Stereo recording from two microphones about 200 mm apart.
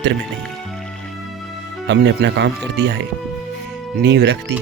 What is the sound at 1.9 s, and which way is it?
Speech, 60° right (ahead or behind).